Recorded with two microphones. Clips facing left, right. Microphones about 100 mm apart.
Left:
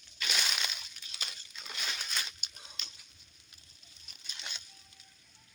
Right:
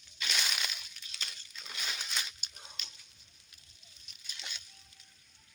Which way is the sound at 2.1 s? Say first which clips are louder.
Even; 15° right (ahead or behind).